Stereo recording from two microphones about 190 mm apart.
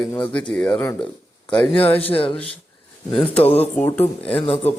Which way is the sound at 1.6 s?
30° left (ahead or behind).